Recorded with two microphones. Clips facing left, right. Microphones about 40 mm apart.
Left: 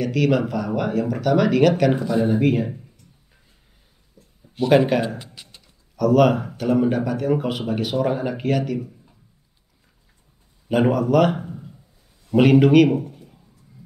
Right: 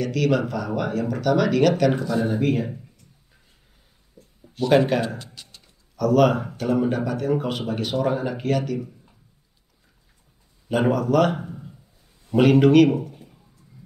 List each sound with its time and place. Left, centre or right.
0.0 s speech: centre
2.0 s speech: centre
2.4 s speech: centre
4.6 s speech: centre
5.2 s a sound: centre
5.9 s speech: centre
10.7 s speech: centre
11.4 s a sound: centre
12.3 s speech: centre